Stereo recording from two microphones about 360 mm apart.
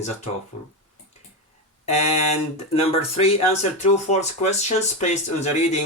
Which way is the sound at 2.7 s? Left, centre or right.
Centre.